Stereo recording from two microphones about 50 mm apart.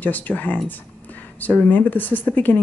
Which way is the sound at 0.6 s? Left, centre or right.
Left.